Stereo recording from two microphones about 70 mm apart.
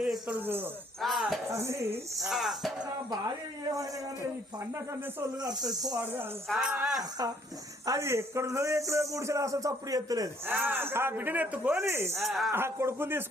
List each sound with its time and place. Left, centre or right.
0.3 s a man's voice: right
1.0 s speech: centre
1.5 s speech: right
2.2 s speech: centre
5.4 s speech: right
6.6 s speech: centre
7.9 s a man's voice: right
10.5 s a man's voice: right
11.8 s speech: right
12.2 s speech: centre
12.5 s speech: right